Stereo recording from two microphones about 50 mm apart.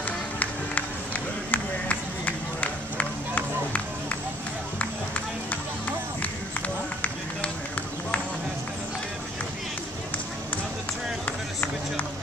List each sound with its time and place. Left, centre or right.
0.4 s music: left
7.0 s run: left
11.2 s run: left